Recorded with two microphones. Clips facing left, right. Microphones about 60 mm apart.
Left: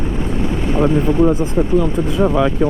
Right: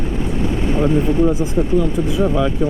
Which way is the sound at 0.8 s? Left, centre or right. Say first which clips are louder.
Left 2 dB; left.